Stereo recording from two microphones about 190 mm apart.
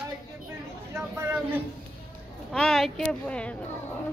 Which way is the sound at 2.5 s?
Centre (ahead or behind).